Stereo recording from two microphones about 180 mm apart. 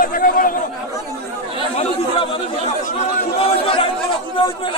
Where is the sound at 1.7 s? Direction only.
35° left (ahead or behind).